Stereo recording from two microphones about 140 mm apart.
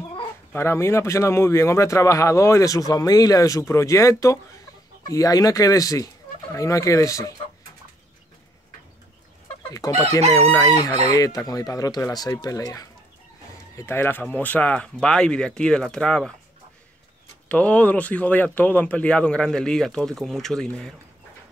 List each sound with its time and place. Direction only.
0.5 s speech: 20° left (ahead or behind)
9.7 s speech: 25° left (ahead or behind); by 16.3 s 5° left (ahead or behind)
17.5 s speech: 10° left (ahead or behind)